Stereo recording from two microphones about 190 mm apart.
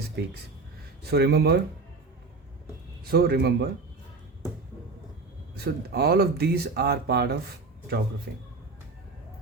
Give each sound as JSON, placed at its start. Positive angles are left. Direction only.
{"t": 0.2, "sound": "speech", "side_deg": -60}
{"t": 3.1, "sound": "speech", "side_deg": -55}
{"t": 5.5, "sound": "speech", "side_deg": -55}